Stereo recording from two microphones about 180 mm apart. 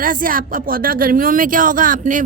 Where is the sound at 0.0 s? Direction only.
50° right (ahead or behind).